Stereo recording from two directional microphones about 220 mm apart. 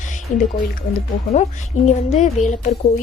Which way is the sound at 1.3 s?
30° left (ahead or behind).